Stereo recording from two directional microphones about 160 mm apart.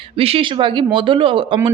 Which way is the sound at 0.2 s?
35° right (ahead or behind).